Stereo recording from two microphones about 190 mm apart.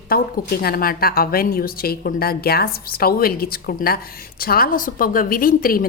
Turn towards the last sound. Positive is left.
turn(degrees=50)  # may be behind; listen again after turning